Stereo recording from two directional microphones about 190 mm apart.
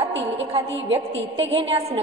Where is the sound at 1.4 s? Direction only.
30° right (ahead or behind).